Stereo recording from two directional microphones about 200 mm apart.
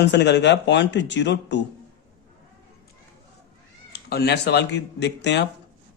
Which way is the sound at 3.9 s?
55° left (ahead or behind).